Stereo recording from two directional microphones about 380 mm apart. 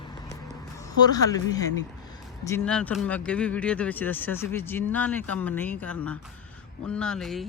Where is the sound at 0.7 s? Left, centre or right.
Centre.